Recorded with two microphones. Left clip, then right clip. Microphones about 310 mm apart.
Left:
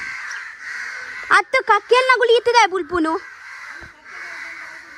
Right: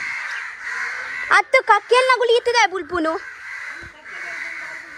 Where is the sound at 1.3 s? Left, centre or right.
Left.